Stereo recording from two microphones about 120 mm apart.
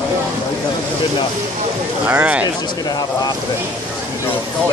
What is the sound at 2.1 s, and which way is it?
Speech, 10° right (ahead or behind).